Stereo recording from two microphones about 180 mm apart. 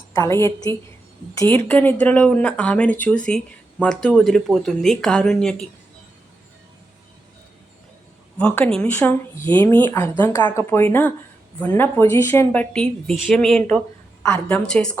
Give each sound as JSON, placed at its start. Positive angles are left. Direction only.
{"t": 0.1, "sound": "speech", "side_deg": 15}
{"t": 8.4, "sound": "speech", "side_deg": 10}
{"t": 14.2, "sound": "a sound", "side_deg": 10}
{"t": 14.5, "sound": "speech", "side_deg": 5}